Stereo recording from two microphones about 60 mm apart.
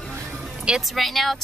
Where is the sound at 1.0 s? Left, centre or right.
Centre.